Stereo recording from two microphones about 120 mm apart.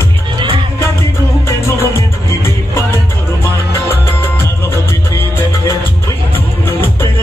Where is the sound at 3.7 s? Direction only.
20° left (ahead or behind).